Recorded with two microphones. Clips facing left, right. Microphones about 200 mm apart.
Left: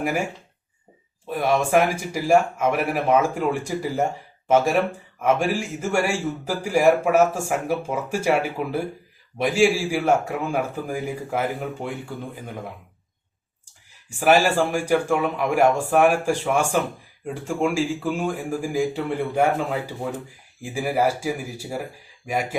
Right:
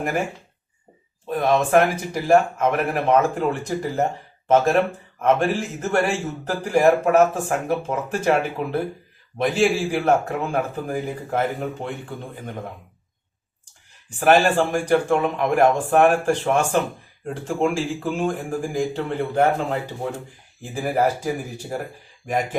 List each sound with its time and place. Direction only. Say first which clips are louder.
1.3 s speech: right 2 dB; 10° left (ahead or behind)
14.2 s speech: right 1 dB; 10° left (ahead or behind)
20.6 s speech: right 1 dB; 10° left (ahead or behind)